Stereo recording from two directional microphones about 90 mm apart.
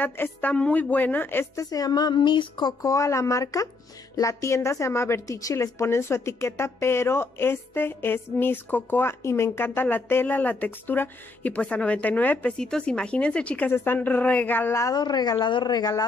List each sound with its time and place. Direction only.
0.0 s a woman's voice: 20° left (ahead or behind); by 2.7 s 55° left (ahead or behind)
2.8 s a woman's voice: 35° left (ahead or behind); by 14.8 s 20° left (ahead or behind)
15.0 s a woman's voice: 50° left (ahead or behind)